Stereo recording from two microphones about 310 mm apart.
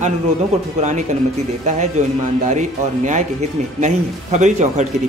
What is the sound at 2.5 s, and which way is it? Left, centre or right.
Speech, right.